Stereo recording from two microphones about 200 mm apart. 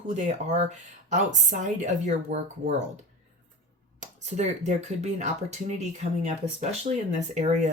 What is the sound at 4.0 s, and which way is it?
Speech, 35° right (ahead or behind).